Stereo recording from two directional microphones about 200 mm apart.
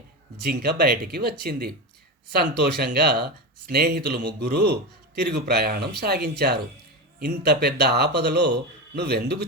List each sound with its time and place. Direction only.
0.4 s a man's voice: 50° right (ahead or behind)